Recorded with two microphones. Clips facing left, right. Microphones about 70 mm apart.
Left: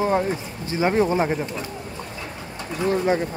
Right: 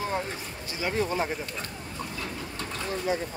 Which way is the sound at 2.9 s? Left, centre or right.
Left.